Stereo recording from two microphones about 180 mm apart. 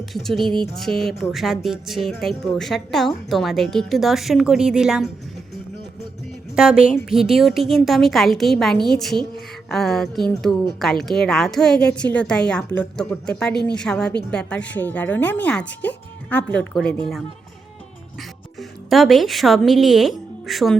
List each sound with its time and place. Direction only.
0.0 s music: centre (ahead or behind)
0.3 s speech: 25° right (ahead or behind)
0.8 s speech: centre (ahead or behind)
6.6 s speech: 5° right (ahead or behind)
18.9 s speech: centre (ahead or behind)